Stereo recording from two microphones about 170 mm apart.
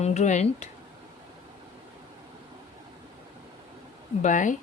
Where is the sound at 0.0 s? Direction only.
40° left (ahead or behind).